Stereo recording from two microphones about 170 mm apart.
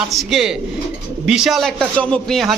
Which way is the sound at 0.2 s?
Centre (ahead or behind).